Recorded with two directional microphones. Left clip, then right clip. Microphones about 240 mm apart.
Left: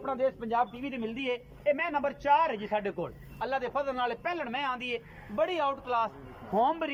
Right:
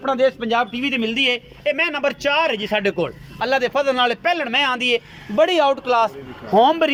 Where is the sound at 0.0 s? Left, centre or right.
Right.